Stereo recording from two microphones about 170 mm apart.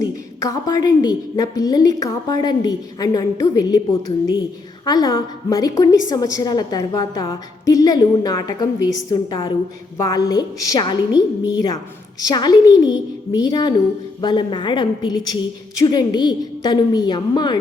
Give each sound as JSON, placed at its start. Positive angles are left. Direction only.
{"t": 0.0, "sound": "a woman's voice", "side_deg": 20}
{"t": 4.9, "sound": "a woman's voice", "side_deg": 20}